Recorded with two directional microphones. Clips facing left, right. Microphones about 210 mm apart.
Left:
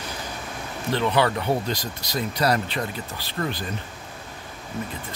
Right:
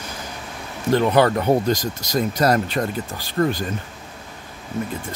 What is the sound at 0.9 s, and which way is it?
Speech, 45° right (ahead or behind).